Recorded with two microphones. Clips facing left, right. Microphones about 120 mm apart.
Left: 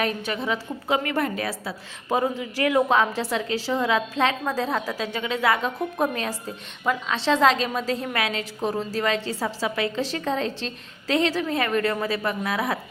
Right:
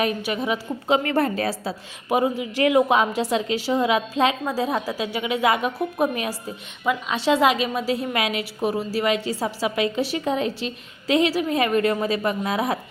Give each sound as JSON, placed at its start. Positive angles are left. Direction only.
{"t": 0.0, "sound": "a woman's voice", "side_deg": -15}
{"t": 1.0, "sound": "a woman's voice", "side_deg": -35}
{"t": 2.0, "sound": "a woman's voice", "side_deg": -10}